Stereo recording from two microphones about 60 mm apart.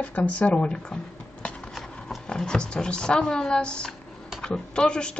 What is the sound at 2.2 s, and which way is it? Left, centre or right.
Speech, centre.